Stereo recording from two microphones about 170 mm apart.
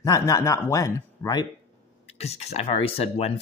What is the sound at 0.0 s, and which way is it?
Speech, 20° left (ahead or behind).